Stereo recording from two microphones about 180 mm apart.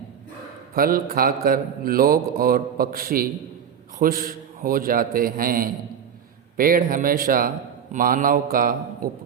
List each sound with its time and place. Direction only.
0.7 s a man's voice: 55° right (ahead or behind)